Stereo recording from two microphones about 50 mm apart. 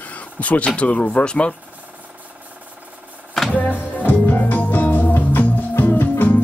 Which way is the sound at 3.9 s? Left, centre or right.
Left.